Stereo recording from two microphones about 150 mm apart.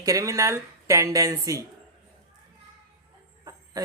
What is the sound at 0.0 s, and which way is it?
Speech, 20° right (ahead or behind).